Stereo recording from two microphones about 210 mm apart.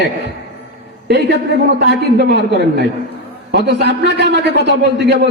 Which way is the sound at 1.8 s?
50° right (ahead or behind).